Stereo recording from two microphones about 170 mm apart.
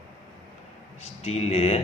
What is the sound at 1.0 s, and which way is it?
Speech, 40° left (ahead or behind).